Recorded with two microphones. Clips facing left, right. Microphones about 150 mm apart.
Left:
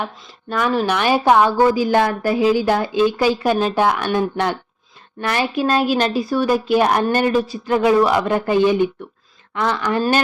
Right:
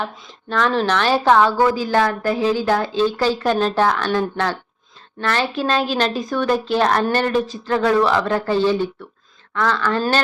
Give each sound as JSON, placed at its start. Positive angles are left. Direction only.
{"t": 0.5, "sound": "a woman's voice", "side_deg": 10}